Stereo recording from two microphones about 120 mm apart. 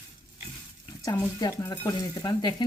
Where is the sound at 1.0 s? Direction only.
35° left (ahead or behind).